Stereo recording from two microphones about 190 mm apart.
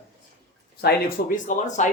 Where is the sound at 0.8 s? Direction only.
45° left (ahead or behind).